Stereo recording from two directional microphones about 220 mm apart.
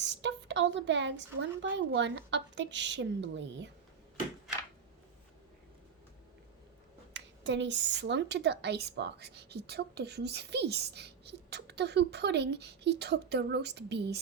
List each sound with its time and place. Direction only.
0.0 s a woman's voice: 55° right (ahead or behind)
7.1 s a woman's voice: 55° right (ahead or behind)